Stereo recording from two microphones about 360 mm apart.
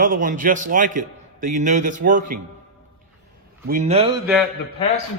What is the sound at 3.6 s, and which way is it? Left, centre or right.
Speech, centre.